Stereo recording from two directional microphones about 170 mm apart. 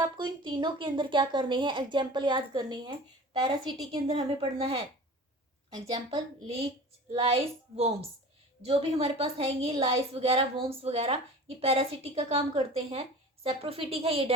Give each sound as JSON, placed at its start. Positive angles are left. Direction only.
{"t": 0.0, "sound": "speech", "side_deg": -25}
{"t": 4.2, "sound": "a woman's voice", "side_deg": -30}